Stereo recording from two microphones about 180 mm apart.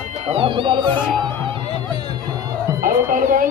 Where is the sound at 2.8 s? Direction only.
50° right (ahead or behind).